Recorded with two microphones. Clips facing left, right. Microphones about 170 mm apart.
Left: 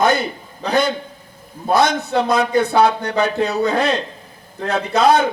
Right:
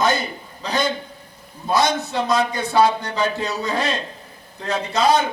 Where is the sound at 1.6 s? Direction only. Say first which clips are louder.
Left 3 dB; 60° left (ahead or behind).